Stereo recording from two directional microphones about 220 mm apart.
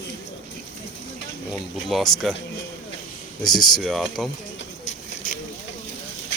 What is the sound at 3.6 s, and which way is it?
Speech, centre (ahead or behind).